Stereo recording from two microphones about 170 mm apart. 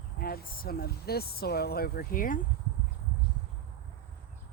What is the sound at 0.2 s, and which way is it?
Speech, 60° left (ahead or behind).